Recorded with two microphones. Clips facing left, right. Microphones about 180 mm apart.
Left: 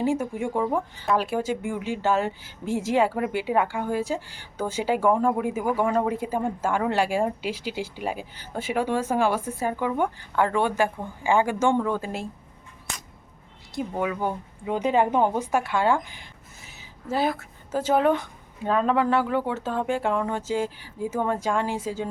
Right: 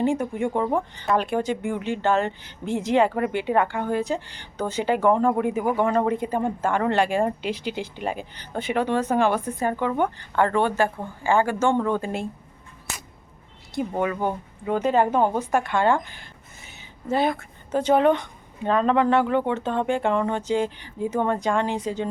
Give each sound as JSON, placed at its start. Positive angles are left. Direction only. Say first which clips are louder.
{"t": 0.0, "sound": "speech", "louder": "right 2 dB", "side_deg": 5}
{"t": 12.9, "sound": "a sound", "louder": "right 1 dB", "side_deg": -5}
{"t": 13.8, "sound": "speech", "louder": "right 3 dB", "side_deg": 0}
{"t": 14.7, "sound": "speech", "louder": "right 1 dB", "side_deg": 15}